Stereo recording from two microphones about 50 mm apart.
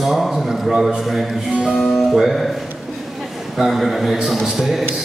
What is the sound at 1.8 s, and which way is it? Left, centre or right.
Speech, centre.